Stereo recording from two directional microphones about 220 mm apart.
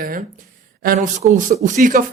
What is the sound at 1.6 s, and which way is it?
Speech, 35° right (ahead or behind).